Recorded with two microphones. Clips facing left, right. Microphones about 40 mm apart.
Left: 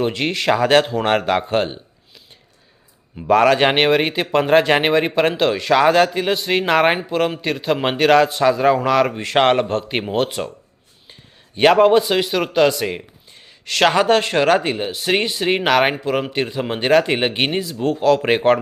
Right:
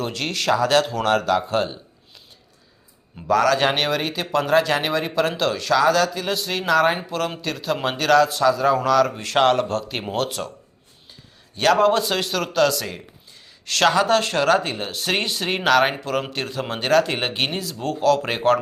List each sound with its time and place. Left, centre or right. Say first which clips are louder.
0.0 s speech: left 5 dB; left
0.5 s speech: left 3 dB; left
3.2 s speech: left 4 dB; left
5.7 s speech: left 4 dB; left
7.1 s speech: left 6 dB; left
10.0 s speech: left 4 dB; centre
11.5 s speech: left 5 dB; left